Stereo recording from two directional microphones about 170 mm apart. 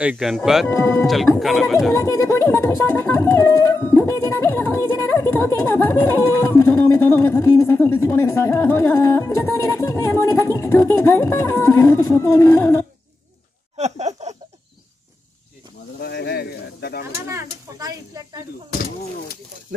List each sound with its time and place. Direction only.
0.0 s speech: 5° right (ahead or behind)
0.7 s speech: 15° left (ahead or behind)
1.0 s speech: centre (ahead or behind)
2.0 s speech: 15° left (ahead or behind)
13.7 s a sound: 40° right (ahead or behind)
16.0 s speech: 75° left (ahead or behind)
17.3 s speech: 20° right (ahead or behind)
18.7 s speech: 60° left (ahead or behind)